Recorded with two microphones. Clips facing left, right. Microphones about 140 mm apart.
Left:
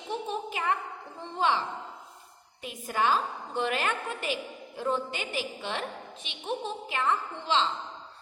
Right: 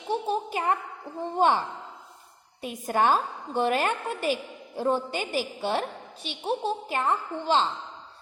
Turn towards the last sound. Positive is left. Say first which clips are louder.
# right 3 dB
turn(degrees=-45)  # may be behind; listen again after turning